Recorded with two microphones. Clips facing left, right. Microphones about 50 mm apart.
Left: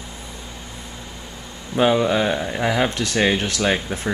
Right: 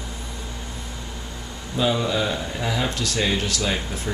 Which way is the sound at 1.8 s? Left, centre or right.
Left.